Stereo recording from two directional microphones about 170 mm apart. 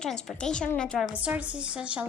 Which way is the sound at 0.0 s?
5° left (ahead or behind).